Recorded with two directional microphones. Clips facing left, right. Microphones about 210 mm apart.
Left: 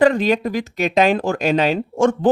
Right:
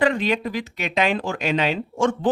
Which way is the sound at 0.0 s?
40° left (ahead or behind).